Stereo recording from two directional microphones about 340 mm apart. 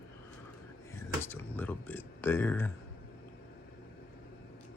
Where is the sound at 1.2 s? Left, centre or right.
Centre.